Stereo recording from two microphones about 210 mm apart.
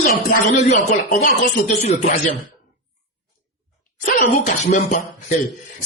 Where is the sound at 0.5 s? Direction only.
35° left (ahead or behind).